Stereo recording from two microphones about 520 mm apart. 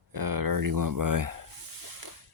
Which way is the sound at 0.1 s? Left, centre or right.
Right.